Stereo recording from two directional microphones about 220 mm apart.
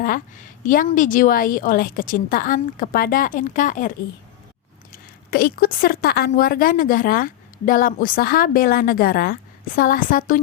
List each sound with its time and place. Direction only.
0.0 s a woman's voice: 40° left (ahead or behind)